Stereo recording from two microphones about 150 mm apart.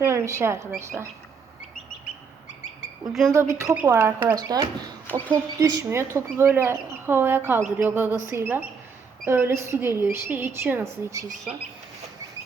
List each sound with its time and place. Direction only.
0.0 s speech: 20° right (ahead or behind)
3.1 s speech: centre (ahead or behind)
3.3 s a woman's voice: 20° right (ahead or behind)
4.4 s speech: 25° right (ahead or behind)
5.0 s speech: 10° left (ahead or behind)
5.5 s a woman's voice: 20° right (ahead or behind)